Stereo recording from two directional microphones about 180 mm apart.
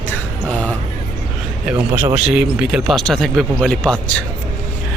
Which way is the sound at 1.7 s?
10° right (ahead or behind).